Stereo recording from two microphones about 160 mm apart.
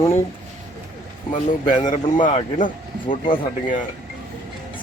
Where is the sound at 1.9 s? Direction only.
50° left (ahead or behind).